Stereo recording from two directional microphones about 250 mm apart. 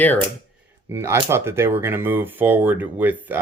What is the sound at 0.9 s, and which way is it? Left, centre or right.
Speech, centre.